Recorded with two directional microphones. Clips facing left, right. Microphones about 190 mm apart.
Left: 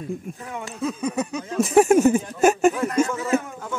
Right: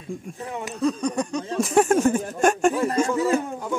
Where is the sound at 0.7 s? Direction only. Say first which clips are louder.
Right 2 dB; 5° left (ahead or behind).